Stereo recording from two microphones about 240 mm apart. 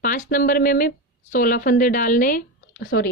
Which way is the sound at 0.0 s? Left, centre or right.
Left.